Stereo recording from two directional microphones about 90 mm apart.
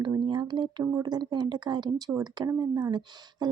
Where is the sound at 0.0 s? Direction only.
60° right (ahead or behind).